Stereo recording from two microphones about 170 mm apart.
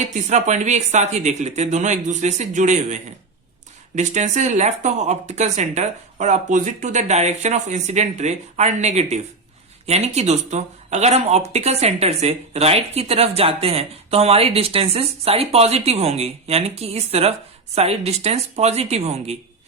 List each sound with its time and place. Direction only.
0.0 s speech: 45° right (ahead or behind)